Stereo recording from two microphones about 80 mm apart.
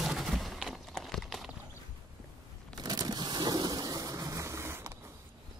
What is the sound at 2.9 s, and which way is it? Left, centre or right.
Rain, right.